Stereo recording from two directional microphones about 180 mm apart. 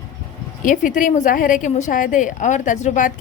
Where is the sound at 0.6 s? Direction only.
50° left (ahead or behind).